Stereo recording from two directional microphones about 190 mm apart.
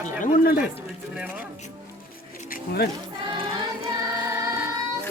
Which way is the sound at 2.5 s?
55° left (ahead or behind).